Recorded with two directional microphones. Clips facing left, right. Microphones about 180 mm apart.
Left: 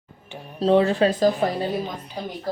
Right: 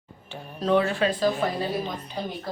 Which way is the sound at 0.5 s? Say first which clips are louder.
Left 5 dB; 30° left (ahead or behind).